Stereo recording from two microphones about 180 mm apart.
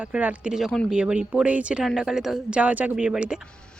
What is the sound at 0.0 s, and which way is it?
Speech, 5° right (ahead or behind).